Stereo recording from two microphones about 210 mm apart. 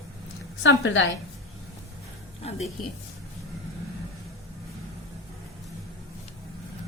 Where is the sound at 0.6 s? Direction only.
60° left (ahead or behind).